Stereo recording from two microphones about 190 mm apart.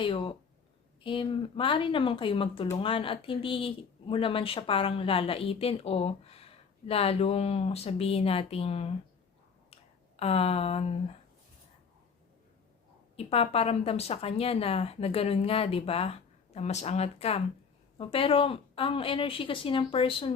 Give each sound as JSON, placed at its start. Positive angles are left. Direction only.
{"t": 0.0, "sound": "a woman's voice", "side_deg": 25}
{"t": 10.2, "sound": "speech", "side_deg": 30}
{"t": 13.1, "sound": "a woman's voice", "side_deg": 30}